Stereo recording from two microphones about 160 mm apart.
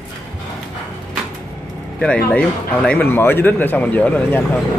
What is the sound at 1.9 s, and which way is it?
Speech, 5° left (ahead or behind).